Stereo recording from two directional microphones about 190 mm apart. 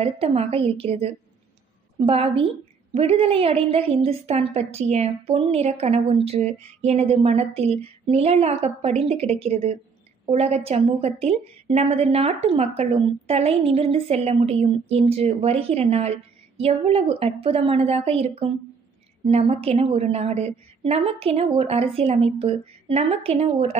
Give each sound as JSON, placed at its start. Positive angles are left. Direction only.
{"t": 0.0, "sound": "a woman's voice", "side_deg": -30}